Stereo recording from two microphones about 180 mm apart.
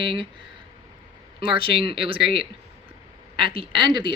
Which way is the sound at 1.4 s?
30° right (ahead or behind).